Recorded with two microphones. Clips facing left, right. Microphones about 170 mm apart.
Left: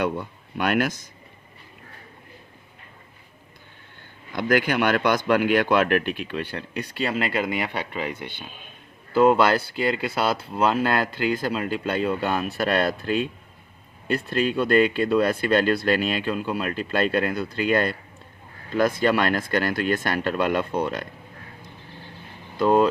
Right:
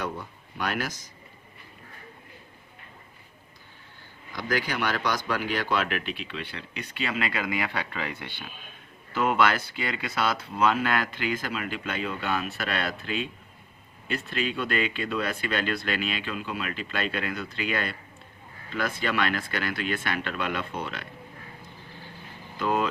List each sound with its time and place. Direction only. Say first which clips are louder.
0.5 s speech: left 8 dB; 60° left (ahead or behind)
4.3 s speech: left 7 dB; 55° left (ahead or behind); by 8.4 s 20° left (ahead or behind)
9.1 s speech: left 7 dB; 35° left (ahead or behind)
22.5 s speech: left 8 dB; 35° left (ahead or behind)